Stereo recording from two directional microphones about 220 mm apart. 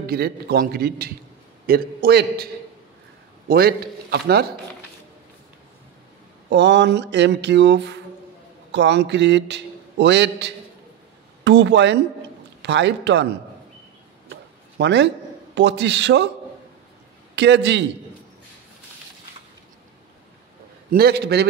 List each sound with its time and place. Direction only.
0.0 s a man's voice: 45° right (ahead or behind)
3.4 s a man's voice: 45° right (ahead or behind)
6.5 s a man's voice: 50° right (ahead or behind)
14.3 s a sound: 50° right (ahead or behind)
15.5 s a man's voice: 50° right (ahead or behind)
17.4 s a man's voice: 50° right (ahead or behind)
20.9 s a man's voice: 45° right (ahead or behind)